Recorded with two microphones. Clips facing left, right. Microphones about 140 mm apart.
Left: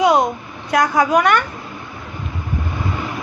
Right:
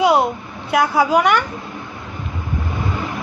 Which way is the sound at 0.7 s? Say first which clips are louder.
Even; 10° right (ahead or behind).